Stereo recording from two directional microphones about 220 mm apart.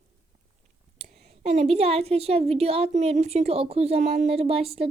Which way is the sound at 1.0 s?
30° right (ahead or behind).